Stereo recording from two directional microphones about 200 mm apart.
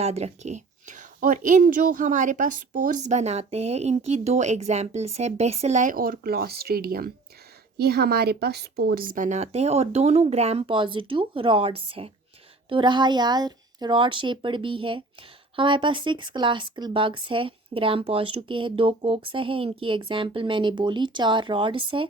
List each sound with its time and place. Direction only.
0.0 s a woman's voice: 30° right (ahead or behind)